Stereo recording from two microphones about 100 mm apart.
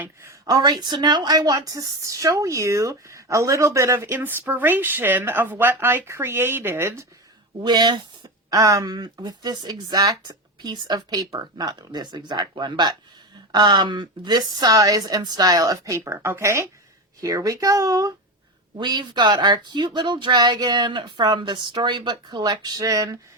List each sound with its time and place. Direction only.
0.0 s speech: 25° right (ahead or behind)
0.4 s a woman's voice: 45° right (ahead or behind); by 7.0 s 25° right (ahead or behind)
7.6 s speech: 45° right (ahead or behind)
8.4 s a woman's voice: 35° right (ahead or behind)
18.8 s speech: 50° right (ahead or behind)